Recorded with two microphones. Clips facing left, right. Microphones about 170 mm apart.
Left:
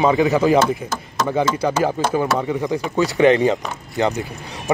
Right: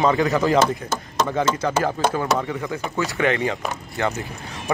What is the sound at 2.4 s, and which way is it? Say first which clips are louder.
Speech: left 5 dB; 20° left (ahead or behind).